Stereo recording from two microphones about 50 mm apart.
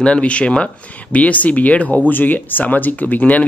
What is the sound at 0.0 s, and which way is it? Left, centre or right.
Speech, left.